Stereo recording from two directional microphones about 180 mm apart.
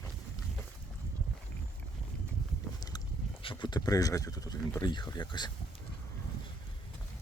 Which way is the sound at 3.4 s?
25° left (ahead or behind).